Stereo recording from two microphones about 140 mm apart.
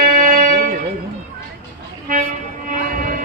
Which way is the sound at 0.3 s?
75° right (ahead or behind).